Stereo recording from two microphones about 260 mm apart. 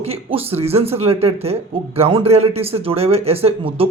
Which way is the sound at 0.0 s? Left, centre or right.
Right.